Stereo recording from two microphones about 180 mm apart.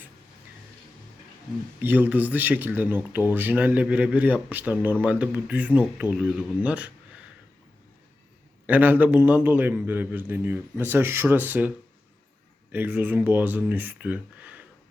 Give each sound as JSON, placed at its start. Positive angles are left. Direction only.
{"t": 1.8, "sound": "speech", "side_deg": -10}
{"t": 8.6, "sound": "speech", "side_deg": -10}
{"t": 12.7, "sound": "speech", "side_deg": -10}